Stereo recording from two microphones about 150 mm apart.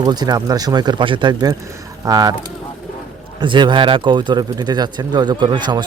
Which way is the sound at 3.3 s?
30° right (ahead or behind).